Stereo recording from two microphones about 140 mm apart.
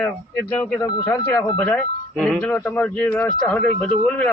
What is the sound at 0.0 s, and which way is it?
Speech, 15° left (ahead or behind).